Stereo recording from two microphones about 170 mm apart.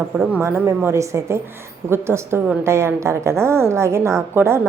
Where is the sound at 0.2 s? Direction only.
10° right (ahead or behind).